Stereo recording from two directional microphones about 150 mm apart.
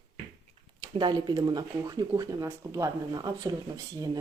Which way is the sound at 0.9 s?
30° right (ahead or behind).